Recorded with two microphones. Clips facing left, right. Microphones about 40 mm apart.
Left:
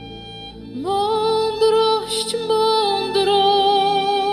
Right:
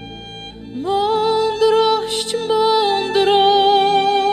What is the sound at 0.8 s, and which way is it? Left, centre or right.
Music, right.